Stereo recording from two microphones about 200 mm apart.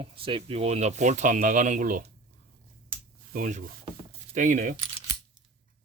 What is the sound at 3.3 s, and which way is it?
Speech, 40° right (ahead or behind).